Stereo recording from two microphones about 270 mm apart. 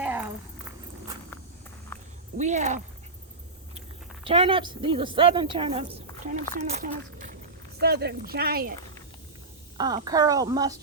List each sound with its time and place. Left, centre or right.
0.0 s a sound: centre
2.4 s speech: right
9.7 s a woman's voice: centre